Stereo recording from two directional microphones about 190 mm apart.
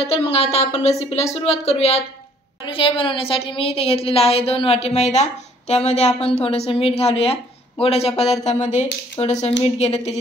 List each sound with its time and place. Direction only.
0.0 s a woman's voice: 30° left (ahead or behind)